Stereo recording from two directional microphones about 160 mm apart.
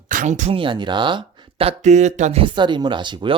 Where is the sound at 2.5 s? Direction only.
30° right (ahead or behind).